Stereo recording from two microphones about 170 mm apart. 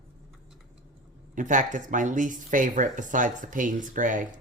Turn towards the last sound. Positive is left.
turn(degrees=-50)  # may be behind; listen again after turning